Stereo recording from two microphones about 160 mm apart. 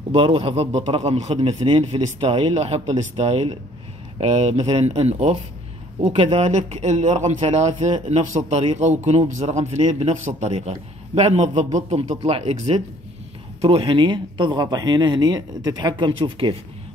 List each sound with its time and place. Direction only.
0.1 s a man's voice: 35° right (ahead or behind)